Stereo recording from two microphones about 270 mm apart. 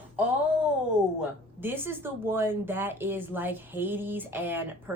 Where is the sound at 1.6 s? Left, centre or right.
Centre.